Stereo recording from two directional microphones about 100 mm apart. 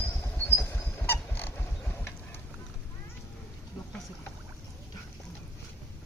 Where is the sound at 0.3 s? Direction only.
25° left (ahead or behind).